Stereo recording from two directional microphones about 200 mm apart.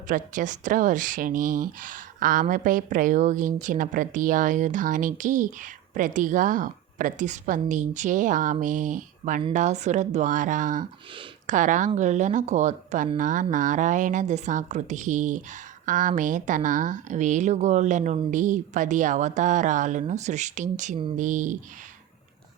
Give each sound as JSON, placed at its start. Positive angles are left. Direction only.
{"t": 0.1, "sound": "speech", "side_deg": -40}